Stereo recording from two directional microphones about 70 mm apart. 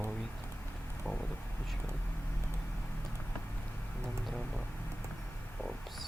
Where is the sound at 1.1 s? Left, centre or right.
Centre.